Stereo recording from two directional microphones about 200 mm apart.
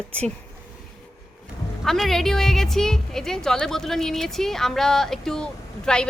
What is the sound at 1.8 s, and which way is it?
A woman's voice, centre (ahead or behind).